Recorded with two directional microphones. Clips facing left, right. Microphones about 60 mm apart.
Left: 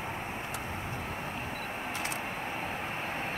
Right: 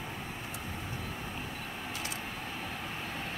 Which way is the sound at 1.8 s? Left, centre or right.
Left.